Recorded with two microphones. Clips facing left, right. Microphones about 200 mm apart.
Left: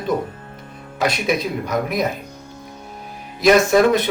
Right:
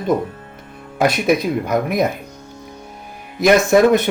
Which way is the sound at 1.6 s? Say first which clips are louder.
Right 3 dB; 55° right (ahead or behind).